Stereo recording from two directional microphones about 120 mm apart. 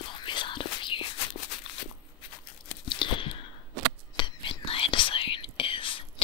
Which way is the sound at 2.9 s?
45° left (ahead or behind).